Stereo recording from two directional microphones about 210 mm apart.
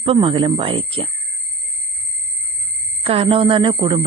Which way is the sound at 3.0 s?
25° right (ahead or behind).